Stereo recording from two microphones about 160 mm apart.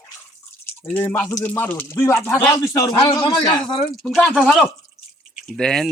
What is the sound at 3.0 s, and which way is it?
Speech, 30° left (ahead or behind).